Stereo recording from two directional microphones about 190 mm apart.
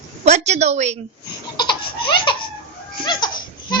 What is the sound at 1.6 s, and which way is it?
Laughter, 25° left (ahead or behind).